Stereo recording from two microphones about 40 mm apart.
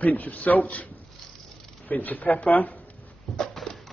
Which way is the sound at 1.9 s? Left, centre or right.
Left.